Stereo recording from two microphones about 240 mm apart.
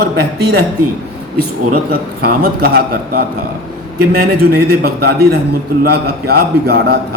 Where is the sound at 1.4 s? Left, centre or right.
Right.